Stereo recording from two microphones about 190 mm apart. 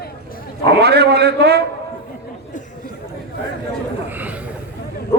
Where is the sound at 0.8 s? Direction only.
60° right (ahead or behind).